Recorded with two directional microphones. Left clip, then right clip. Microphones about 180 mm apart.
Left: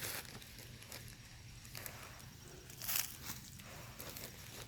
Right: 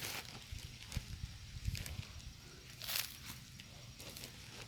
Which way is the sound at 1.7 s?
35° left (ahead or behind).